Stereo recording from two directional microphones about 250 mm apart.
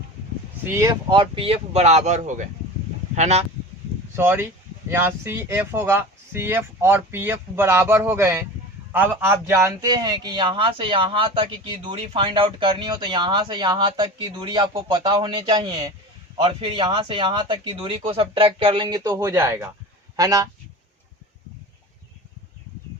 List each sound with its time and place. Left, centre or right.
0.6 s speech: centre; by 3.4 s right
4.1 s a man's voice: centre